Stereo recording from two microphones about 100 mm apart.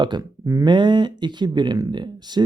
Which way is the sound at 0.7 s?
50° right (ahead or behind).